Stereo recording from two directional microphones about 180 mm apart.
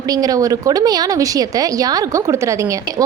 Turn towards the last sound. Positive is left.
turn(degrees=-15)  # may be behind; listen again after turning